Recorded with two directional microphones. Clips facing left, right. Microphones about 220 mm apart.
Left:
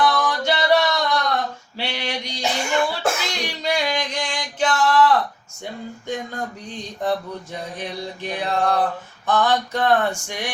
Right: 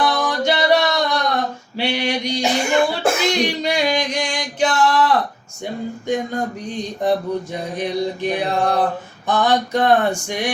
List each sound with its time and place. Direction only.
0.0 s a sound: 15° right (ahead or behind)
1.7 s cough: 15° right (ahead or behind)
6.3 s mantra: 15° right (ahead or behind)